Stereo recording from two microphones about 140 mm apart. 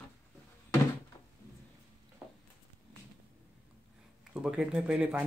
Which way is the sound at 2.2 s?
10° right (ahead or behind).